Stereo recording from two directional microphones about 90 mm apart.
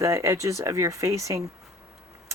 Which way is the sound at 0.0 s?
35° right (ahead or behind).